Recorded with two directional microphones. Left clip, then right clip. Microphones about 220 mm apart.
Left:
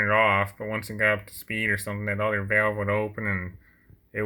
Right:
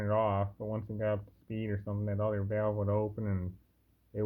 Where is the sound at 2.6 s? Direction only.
30° left (ahead or behind).